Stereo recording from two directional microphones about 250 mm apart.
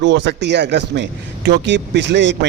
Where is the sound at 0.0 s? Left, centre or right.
Right.